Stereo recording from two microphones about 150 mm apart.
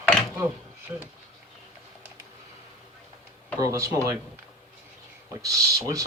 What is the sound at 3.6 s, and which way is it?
Speech, 20° right (ahead or behind).